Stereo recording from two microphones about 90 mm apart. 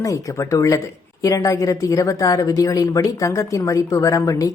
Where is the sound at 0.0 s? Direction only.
40° left (ahead or behind).